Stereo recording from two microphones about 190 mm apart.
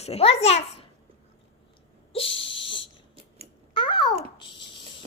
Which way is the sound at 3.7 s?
25° left (ahead or behind).